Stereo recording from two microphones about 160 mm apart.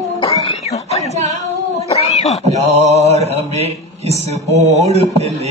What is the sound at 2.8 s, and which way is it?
Mantra, 40° right (ahead or behind).